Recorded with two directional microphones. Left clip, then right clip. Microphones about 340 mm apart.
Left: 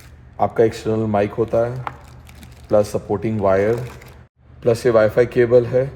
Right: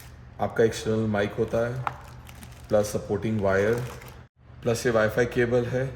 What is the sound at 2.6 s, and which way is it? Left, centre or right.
Speech, left.